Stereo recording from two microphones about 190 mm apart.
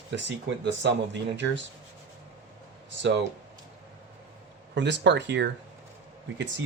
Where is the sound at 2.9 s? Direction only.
70° right (ahead or behind).